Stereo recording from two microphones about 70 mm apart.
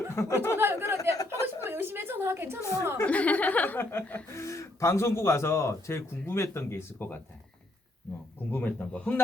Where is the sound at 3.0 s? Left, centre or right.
Centre.